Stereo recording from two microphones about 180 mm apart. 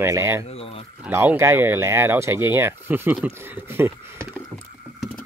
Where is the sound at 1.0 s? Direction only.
10° right (ahead or behind).